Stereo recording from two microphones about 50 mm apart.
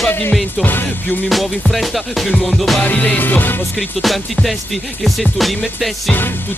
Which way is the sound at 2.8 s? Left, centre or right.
Left.